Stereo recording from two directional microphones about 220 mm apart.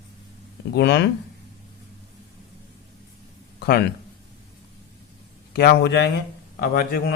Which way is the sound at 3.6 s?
45° left (ahead or behind).